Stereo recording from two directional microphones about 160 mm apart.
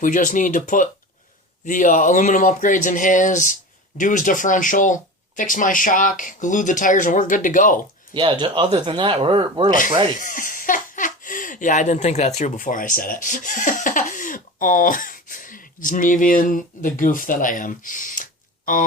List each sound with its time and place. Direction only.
0.0 s speech: 55° left (ahead or behind)
8.1 s speech: 30° right (ahead or behind)
10.2 s speech: 55° left (ahead or behind)